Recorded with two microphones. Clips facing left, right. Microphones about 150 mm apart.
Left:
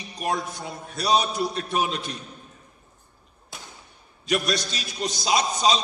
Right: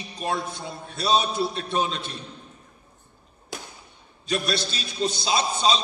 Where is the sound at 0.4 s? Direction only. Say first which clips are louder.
Even; 25° right (ahead or behind).